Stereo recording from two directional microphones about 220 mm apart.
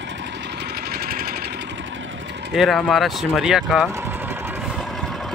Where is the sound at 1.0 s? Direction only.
45° right (ahead or behind).